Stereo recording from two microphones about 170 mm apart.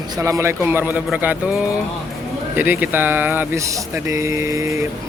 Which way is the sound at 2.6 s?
10° right (ahead or behind).